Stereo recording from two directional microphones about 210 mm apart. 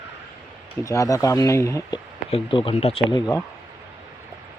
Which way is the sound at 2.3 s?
25° left (ahead or behind).